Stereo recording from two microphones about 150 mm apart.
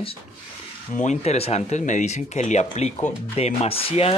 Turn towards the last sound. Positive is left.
turn(degrees=40)  # may be behind; listen again after turning